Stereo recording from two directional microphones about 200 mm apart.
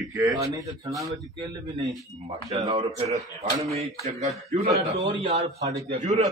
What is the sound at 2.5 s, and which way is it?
Speech, 30° right (ahead or behind).